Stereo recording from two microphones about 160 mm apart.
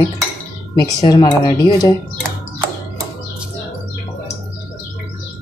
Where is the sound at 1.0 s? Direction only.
25° left (ahead or behind).